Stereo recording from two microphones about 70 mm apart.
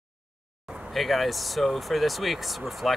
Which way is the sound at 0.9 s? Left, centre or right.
Centre.